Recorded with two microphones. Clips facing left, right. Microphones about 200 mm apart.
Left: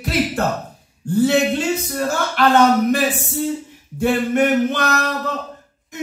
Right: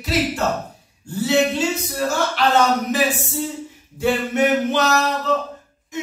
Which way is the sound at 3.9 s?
55° left (ahead or behind).